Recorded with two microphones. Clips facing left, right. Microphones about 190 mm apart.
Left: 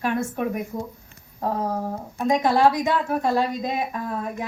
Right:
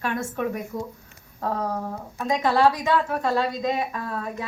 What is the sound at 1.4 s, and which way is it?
A woman's voice, 15° left (ahead or behind).